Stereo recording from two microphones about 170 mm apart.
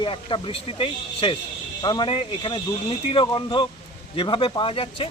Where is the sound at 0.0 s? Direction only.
30° left (ahead or behind).